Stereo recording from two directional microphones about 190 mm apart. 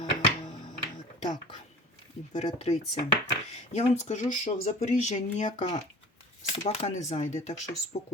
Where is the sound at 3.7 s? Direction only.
35° left (ahead or behind).